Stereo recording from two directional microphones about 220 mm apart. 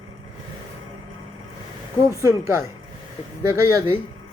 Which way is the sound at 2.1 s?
15° right (ahead or behind).